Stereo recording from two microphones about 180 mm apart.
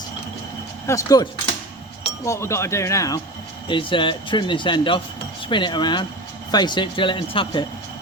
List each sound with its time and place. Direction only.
0.9 s speech: 20° left (ahead or behind)
3.7 s speech: 30° left (ahead or behind)